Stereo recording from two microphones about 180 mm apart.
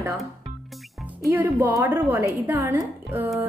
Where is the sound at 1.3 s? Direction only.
10° right (ahead or behind).